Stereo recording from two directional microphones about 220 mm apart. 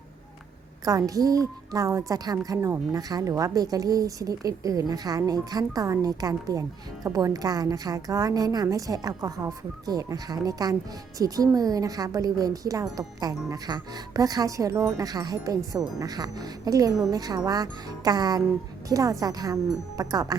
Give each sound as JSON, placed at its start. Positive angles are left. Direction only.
{"t": 0.9, "sound": "speech", "side_deg": -15}